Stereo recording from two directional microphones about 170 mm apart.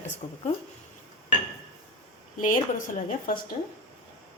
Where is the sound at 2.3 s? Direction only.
50° left (ahead or behind).